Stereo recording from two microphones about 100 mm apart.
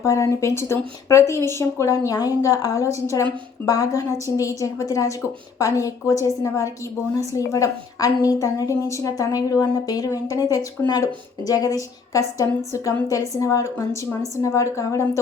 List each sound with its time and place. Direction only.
0.0 s a woman's voice: 30° left (ahead or behind)